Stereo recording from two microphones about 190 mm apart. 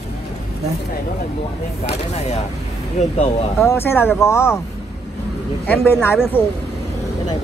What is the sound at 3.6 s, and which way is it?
Speech, 10° left (ahead or behind).